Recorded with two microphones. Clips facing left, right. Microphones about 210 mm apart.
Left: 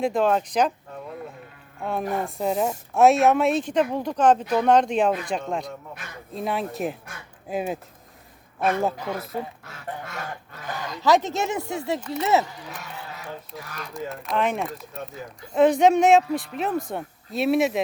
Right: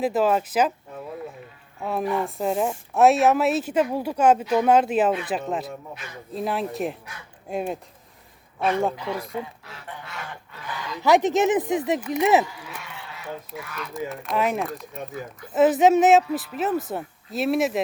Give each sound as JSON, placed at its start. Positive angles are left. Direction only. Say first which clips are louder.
{"t": 0.0, "sound": "a woman's voice", "louder": "even", "side_deg": -5}
{"t": 1.8, "sound": "a woman's voice", "louder": "right 2 dB", "side_deg": 0}
{"t": 9.0, "sound": "speech", "louder": "right 1 dB", "side_deg": 45}
{"t": 9.3, "sound": "a sound", "louder": "left 1 dB", "side_deg": 45}
{"t": 11.0, "sound": "speech", "louder": "right 3 dB", "side_deg": -15}
{"t": 12.6, "sound": "a sound", "louder": "left 2 dB", "side_deg": 40}
{"t": 13.6, "sound": "speech", "louder": "right 2 dB", "side_deg": 40}
{"t": 13.9, "sound": "a woman's voice", "louder": "even", "side_deg": 0}